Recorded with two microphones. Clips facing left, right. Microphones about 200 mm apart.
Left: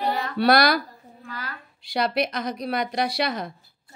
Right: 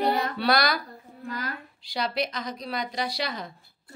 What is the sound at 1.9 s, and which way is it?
A woman's voice, 65° left (ahead or behind).